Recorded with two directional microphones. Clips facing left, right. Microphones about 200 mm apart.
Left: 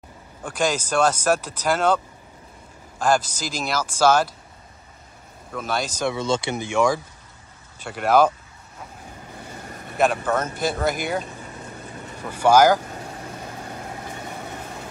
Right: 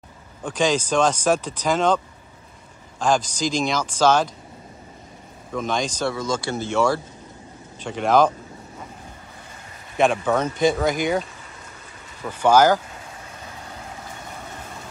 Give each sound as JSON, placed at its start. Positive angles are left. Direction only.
{"t": 0.4, "sound": "speech", "side_deg": 10}
{"t": 3.0, "sound": "speech", "side_deg": 5}
{"t": 5.5, "sound": "speech", "side_deg": 5}
{"t": 6.0, "sound": "speech", "side_deg": 25}
{"t": 9.9, "sound": "speech", "side_deg": 5}
{"t": 12.3, "sound": "speech", "side_deg": 10}